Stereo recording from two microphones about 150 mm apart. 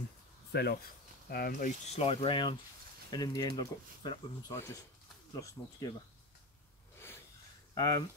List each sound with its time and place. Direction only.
0.5 s speech: 90° left
1.3 s speech: 80° left
1.9 s speech: 45° left (ahead or behind); by 5.9 s 25° left (ahead or behind)
7.7 s speech: 25° left (ahead or behind)